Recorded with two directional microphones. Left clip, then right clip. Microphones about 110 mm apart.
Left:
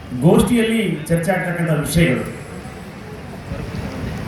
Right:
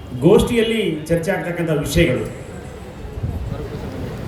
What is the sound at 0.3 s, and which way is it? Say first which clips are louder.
Speech: right 2 dB; 15° left (ahead or behind).